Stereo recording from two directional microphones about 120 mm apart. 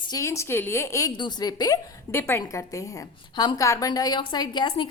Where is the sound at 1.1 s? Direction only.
35° left (ahead or behind).